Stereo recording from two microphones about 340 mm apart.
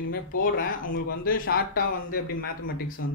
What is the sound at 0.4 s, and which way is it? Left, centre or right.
Speech, left.